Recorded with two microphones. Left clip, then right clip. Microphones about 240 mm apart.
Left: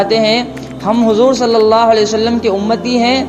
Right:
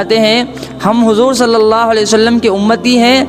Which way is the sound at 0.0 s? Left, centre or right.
Right.